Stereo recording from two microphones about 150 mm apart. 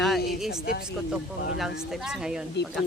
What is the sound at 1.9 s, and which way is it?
Speech, centre (ahead or behind).